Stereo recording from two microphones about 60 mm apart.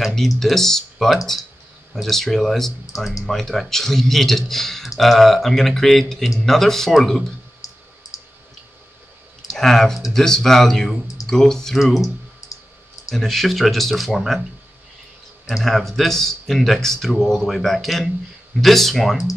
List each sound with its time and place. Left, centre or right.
0.0 s a sound: centre
0.4 s speech: centre
7.6 s clicking: left
9.5 s speech: centre
13.1 s speech: centre
15.4 s speech: centre